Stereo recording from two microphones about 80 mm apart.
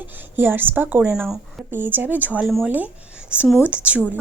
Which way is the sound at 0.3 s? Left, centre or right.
Right.